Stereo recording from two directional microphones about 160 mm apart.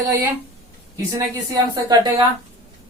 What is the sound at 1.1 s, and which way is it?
A woman's voice, 25° right (ahead or behind).